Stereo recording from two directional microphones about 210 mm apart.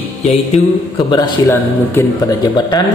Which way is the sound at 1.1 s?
20° left (ahead or behind).